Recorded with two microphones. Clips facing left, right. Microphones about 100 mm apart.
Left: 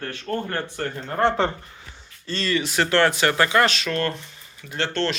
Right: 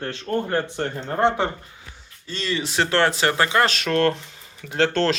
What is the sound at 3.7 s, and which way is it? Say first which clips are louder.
Speech: right 5 dB; 70° right (ahead or behind).